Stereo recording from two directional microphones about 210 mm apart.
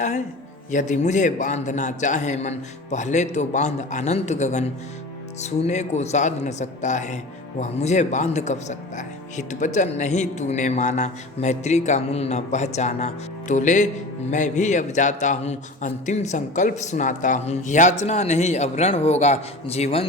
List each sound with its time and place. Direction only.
0.7 s speech: 35° left (ahead or behind)